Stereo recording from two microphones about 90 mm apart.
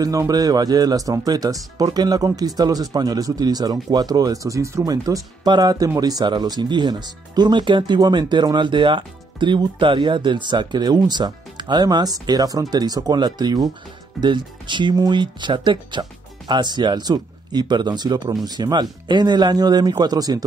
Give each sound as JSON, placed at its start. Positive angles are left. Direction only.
{"t": 0.3, "sound": "speech", "side_deg": -45}